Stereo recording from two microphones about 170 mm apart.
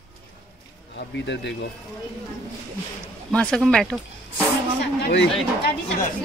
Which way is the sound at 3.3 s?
5° left (ahead or behind).